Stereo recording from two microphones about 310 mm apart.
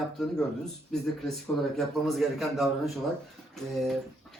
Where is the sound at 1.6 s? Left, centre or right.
Centre.